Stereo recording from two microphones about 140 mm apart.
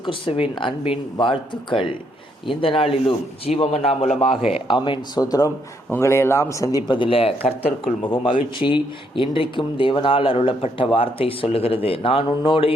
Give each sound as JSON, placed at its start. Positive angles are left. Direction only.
{"t": 0.0, "sound": "a man's voice", "side_deg": 40}
{"t": 4.5, "sound": "speech", "side_deg": 35}